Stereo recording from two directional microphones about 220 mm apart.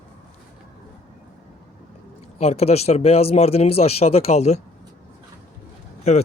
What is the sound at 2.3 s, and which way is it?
Speech, 30° left (ahead or behind).